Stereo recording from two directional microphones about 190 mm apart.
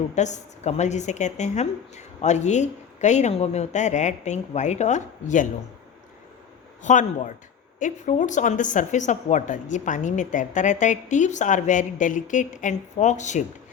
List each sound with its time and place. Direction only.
0.1 s a woman's voice: 40° left (ahead or behind)
6.8 s a woman's voice: 40° left (ahead or behind)